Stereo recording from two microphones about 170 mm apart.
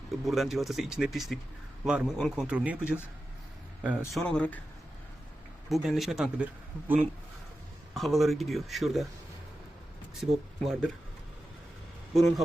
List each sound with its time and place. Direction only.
0.3 s speech: centre (ahead or behind)
3.8 s speech: centre (ahead or behind)
5.6 s speech: centre (ahead or behind)
10.2 s speech: centre (ahead or behind)